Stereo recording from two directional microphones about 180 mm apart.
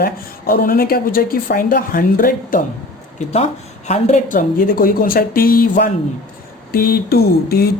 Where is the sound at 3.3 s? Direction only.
35° left (ahead or behind); by 7.6 s 60° left (ahead or behind).